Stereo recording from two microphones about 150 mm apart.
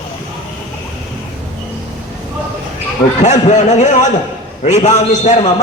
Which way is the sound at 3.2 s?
50° left (ahead or behind).